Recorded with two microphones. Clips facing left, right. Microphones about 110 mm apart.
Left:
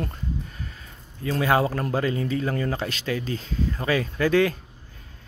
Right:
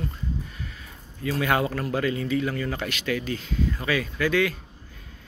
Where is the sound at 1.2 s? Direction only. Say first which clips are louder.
Left 2 dB; 30° left (ahead or behind).